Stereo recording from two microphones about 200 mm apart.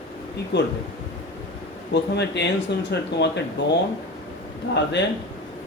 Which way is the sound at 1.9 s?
60° left (ahead or behind).